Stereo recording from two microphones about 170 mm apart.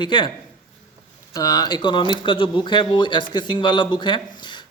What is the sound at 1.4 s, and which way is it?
Speech, 20° left (ahead or behind).